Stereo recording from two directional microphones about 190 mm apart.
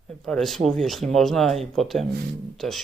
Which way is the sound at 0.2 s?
Centre (ahead or behind).